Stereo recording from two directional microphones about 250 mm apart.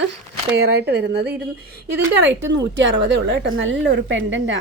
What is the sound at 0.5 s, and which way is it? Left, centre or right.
Speech, right.